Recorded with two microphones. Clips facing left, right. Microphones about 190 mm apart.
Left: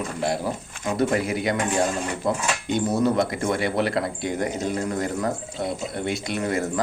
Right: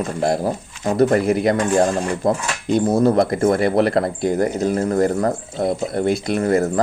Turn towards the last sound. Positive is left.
turn(degrees=-35)  # may be behind; listen again after turning